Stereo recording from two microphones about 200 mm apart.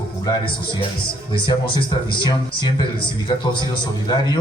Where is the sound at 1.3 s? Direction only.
25° left (ahead or behind).